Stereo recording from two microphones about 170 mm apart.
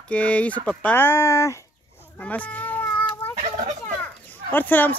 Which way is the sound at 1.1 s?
20° left (ahead or behind).